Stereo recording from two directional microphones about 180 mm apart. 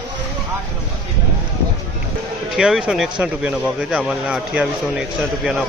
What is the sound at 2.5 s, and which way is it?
Speech, 5° right (ahead or behind).